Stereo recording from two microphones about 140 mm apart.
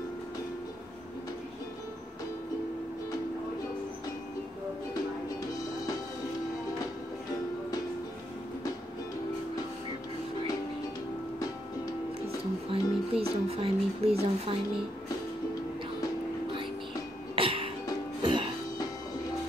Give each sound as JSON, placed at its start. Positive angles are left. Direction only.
{"t": 12.6, "sound": "music", "side_deg": -45}
{"t": 17.4, "sound": "music", "side_deg": -40}